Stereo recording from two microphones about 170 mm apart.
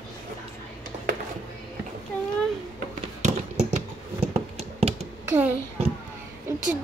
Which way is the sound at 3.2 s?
45° right (ahead or behind).